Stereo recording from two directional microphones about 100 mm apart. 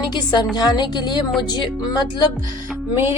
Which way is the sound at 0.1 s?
45° left (ahead or behind).